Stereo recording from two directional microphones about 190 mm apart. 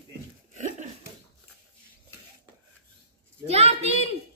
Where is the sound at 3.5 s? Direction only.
35° right (ahead or behind).